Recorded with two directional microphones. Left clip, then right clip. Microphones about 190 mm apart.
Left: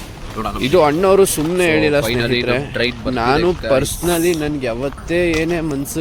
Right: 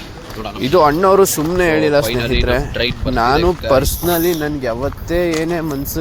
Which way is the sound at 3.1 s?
Centre (ahead or behind).